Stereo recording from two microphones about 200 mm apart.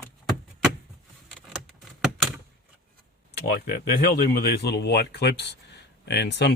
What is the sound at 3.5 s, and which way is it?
Speech, 50° left (ahead or behind).